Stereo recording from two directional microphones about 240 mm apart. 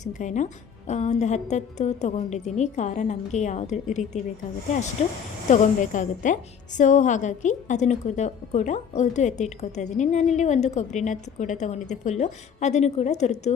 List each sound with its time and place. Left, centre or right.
0.0 s a woman's voice: left
5.5 s a woman's voice: left